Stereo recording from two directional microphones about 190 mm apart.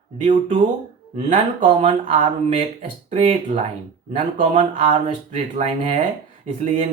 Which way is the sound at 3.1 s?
35° right (ahead or behind).